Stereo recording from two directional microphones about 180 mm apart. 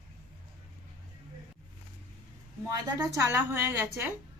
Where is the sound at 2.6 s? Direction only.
15° right (ahead or behind).